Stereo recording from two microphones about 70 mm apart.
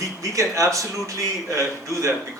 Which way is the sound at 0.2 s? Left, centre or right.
Right.